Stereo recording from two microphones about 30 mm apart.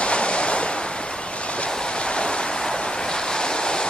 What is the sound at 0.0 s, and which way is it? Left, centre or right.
Waves, left.